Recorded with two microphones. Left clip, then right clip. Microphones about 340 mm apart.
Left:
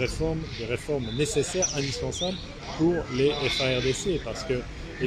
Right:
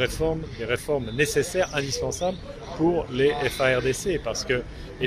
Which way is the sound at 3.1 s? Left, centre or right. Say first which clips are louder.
Right 2 dB; right.